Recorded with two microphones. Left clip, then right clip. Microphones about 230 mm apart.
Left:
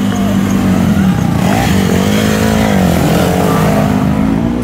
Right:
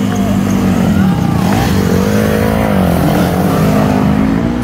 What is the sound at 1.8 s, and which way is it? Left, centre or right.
Vehicle, left.